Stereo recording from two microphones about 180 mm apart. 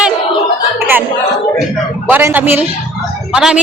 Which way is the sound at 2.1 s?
10° right (ahead or behind).